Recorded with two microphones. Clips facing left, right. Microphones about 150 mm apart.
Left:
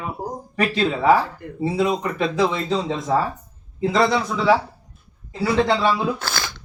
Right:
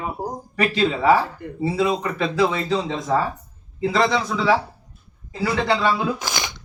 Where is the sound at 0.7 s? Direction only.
Centre (ahead or behind).